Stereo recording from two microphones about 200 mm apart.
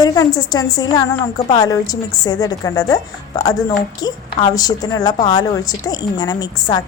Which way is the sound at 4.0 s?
20° left (ahead or behind).